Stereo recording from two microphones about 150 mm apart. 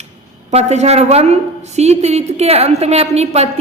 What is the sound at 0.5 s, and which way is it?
A woman's voice, 45° right (ahead or behind).